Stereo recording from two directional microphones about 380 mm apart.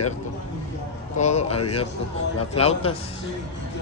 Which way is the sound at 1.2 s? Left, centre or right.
Centre.